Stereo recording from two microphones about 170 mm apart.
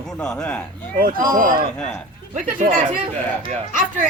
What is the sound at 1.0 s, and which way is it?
Speech, 55° right (ahead or behind).